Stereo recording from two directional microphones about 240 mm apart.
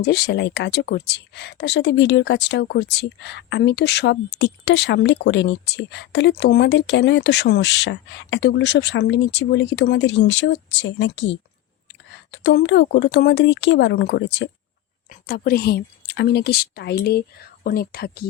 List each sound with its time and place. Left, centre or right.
0.0 s a woman's voice: left